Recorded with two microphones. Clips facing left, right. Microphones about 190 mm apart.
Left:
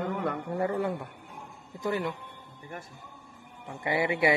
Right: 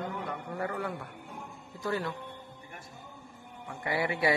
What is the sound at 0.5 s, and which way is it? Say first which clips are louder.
Speech: left 5 dB; 25° left (ahead or behind).